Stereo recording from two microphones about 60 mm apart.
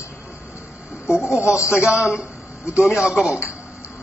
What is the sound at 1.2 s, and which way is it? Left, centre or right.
Speech, left.